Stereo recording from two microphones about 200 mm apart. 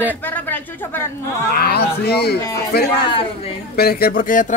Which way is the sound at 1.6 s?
50° left (ahead or behind).